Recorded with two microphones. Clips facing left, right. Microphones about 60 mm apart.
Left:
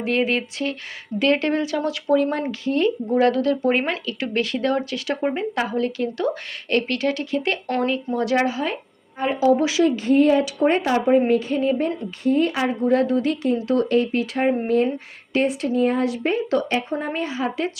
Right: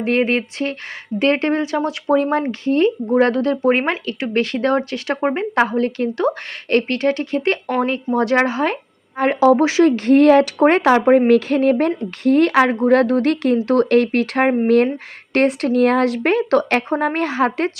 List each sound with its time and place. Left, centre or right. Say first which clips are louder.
0.0 s a woman's voice: right 4 dB; right
9.1 s speech: right 5 dB; right
9.6 s a woman's voice: right 5 dB; right
9.9 s a woman's voice: right 6 dB; right
16.9 s speech: right 6 dB; right